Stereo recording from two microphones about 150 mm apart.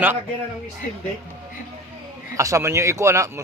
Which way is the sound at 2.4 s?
20° right (ahead or behind).